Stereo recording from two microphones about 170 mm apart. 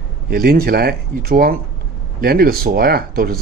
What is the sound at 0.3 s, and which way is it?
Speech, 65° right (ahead or behind).